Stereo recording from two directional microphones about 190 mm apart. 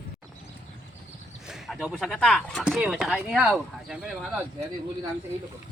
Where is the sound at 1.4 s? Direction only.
Centre (ahead or behind).